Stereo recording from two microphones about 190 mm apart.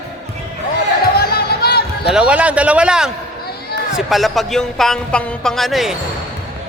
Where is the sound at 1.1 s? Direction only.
55° left (ahead or behind).